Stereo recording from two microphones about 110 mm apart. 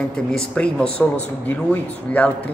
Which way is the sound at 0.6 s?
10° left (ahead or behind).